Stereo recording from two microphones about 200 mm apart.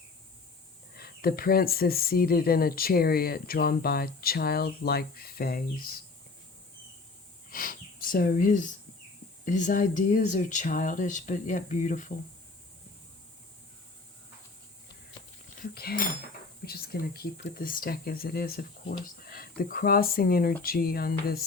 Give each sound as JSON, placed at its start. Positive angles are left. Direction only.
{"t": 0.9, "sound": "speech", "side_deg": 50}
{"t": 7.5, "sound": "speech", "side_deg": 45}
{"t": 15.6, "sound": "speech", "side_deg": 50}